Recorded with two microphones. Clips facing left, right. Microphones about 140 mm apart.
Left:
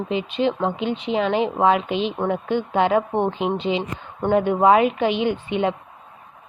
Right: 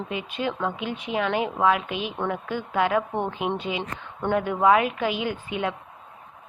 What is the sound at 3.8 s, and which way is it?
Speech, 15° left (ahead or behind).